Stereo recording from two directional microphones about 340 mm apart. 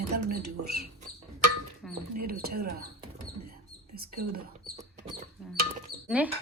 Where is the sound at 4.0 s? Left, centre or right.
Right.